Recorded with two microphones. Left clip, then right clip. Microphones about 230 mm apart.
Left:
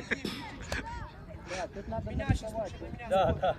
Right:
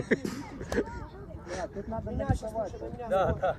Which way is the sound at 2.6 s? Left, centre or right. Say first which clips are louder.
Right 3 dB; left.